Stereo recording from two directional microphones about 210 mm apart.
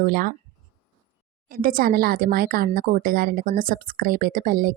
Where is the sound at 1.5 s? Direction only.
45° right (ahead or behind).